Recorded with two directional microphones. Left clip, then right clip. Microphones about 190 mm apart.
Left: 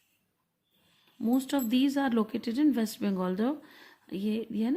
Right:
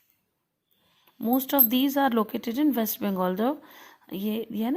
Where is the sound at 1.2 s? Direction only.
10° right (ahead or behind).